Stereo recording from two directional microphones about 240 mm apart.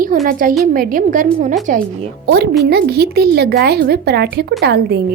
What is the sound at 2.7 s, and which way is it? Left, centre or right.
A woman's voice, right.